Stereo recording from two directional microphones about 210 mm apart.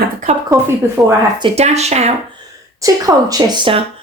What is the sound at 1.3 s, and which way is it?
Speech, 25° right (ahead or behind).